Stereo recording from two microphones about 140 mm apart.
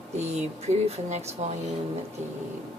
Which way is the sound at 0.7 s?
50° right (ahead or behind).